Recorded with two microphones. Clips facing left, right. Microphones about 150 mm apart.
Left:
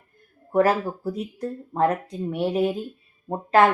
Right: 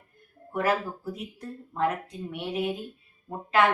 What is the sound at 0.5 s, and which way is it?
Speech, 40° left (ahead or behind).